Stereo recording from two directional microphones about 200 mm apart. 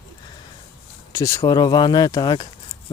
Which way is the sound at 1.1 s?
15° left (ahead or behind).